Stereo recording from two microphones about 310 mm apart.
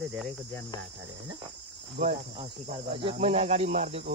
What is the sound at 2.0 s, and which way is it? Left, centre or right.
Cricket, right.